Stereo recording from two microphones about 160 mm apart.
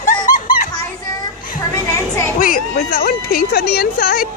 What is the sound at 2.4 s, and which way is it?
Speech, 65° left (ahead or behind).